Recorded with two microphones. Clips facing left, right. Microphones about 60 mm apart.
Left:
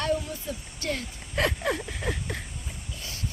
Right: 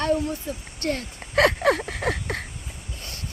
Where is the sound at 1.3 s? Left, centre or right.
Right.